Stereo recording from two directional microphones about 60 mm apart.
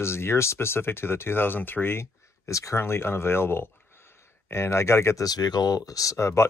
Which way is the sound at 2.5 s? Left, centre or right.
Left.